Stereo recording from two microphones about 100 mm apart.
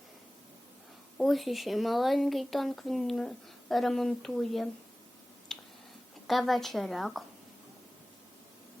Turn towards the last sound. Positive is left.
turn(degrees=0)  # may be behind; listen again after turning